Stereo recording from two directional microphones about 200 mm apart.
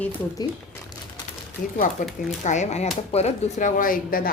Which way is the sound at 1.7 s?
40° left (ahead or behind).